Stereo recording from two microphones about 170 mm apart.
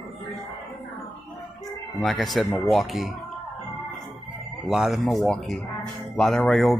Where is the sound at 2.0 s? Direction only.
Centre (ahead or behind).